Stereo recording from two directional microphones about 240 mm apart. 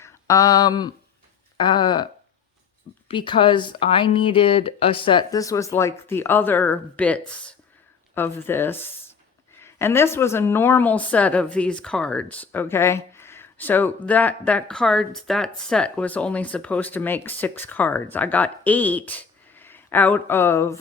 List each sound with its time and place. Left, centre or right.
0.0 s a sound: centre
1.5 s a woman's voice: centre
3.1 s a woman's voice: centre